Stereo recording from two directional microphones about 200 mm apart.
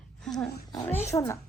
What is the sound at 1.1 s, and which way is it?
Speech, 15° left (ahead or behind).